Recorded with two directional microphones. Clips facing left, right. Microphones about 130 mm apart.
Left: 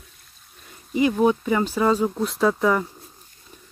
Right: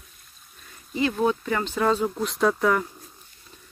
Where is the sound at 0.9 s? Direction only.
15° left (ahead or behind).